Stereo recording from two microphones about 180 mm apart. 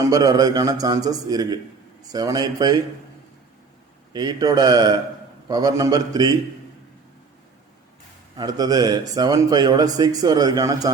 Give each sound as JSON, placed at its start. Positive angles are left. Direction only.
{"t": 0.0, "sound": "speech", "side_deg": -20}
{"t": 4.1, "sound": "speech", "side_deg": -20}
{"t": 8.4, "sound": "speech", "side_deg": -20}